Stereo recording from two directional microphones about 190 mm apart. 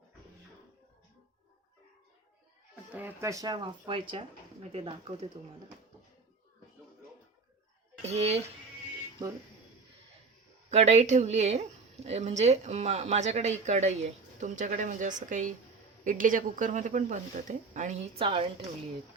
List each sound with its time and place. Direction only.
2.9 s speech: 10° right (ahead or behind); by 5.3 s 30° right (ahead or behind)
8.0 s speech: 35° right (ahead or behind)
10.7 s speech: 35° right (ahead or behind)